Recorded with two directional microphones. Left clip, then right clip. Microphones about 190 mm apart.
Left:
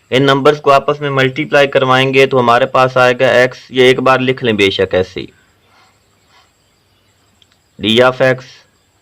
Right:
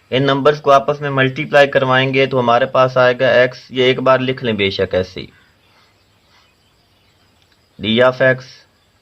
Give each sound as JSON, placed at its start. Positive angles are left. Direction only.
{"t": 0.1, "sound": "speech", "side_deg": 40}
{"t": 7.8, "sound": "speech", "side_deg": 35}